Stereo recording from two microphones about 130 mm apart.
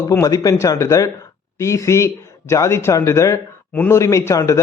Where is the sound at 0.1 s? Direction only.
25° left (ahead or behind).